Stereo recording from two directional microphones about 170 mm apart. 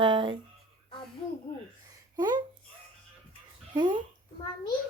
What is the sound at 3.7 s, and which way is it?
Speech, 25° right (ahead or behind).